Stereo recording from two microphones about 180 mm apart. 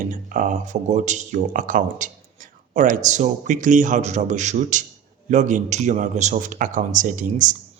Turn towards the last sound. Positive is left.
turn(degrees=-45)  # may be behind; listen again after turning